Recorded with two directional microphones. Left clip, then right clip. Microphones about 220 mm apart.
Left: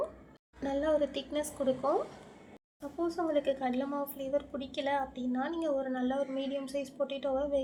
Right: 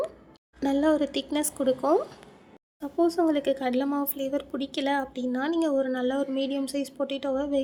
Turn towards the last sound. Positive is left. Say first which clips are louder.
# right 4 dB
turn(degrees=-50)  # may be behind; listen again after turning